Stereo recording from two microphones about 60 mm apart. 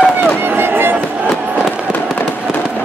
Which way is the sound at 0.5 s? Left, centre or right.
Right.